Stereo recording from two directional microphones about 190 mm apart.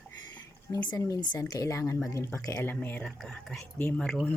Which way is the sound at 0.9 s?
20° left (ahead or behind).